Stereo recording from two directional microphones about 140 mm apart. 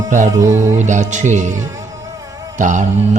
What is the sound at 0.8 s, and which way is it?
Speech, 60° right (ahead or behind).